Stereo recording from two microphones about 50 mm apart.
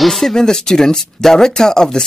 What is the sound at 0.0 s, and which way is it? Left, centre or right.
Speech, centre.